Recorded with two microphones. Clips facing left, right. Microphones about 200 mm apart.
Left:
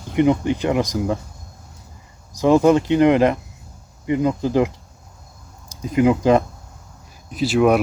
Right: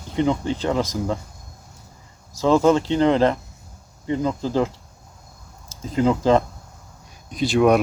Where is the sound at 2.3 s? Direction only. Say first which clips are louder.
Left 2 dB; 15° left (ahead or behind).